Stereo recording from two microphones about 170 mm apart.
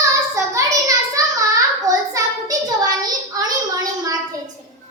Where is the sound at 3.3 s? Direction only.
20° right (ahead or behind).